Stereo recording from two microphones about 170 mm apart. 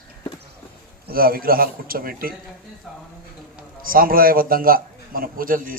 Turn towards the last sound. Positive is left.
turn(degrees=-55)  # may be behind; listen again after turning